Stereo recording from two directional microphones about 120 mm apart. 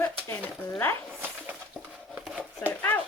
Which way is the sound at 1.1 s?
15° right (ahead or behind).